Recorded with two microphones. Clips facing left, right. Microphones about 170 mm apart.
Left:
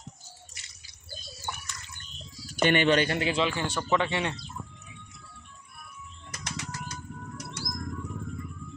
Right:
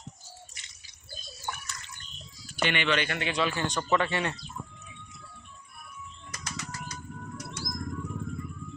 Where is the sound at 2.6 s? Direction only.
45° left (ahead or behind).